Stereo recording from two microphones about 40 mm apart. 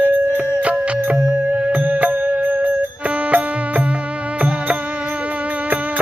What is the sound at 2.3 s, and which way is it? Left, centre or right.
Music, right.